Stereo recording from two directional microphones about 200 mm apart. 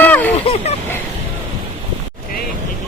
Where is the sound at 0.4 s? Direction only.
30° left (ahead or behind).